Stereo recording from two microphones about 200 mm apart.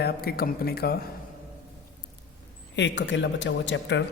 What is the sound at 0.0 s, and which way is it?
Speech, 50° left (ahead or behind).